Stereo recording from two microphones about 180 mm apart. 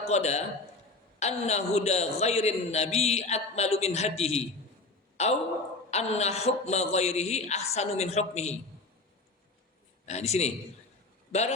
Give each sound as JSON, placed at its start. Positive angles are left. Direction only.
{"t": 0.1, "sound": "a man's voice", "side_deg": 40}
{"t": 10.1, "sound": "a man's voice", "side_deg": 40}